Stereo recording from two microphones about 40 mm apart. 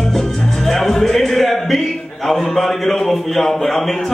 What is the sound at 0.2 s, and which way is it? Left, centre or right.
A man's voice, centre.